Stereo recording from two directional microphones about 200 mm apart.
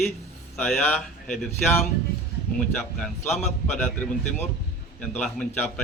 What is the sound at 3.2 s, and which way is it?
Speech, 35° left (ahead or behind).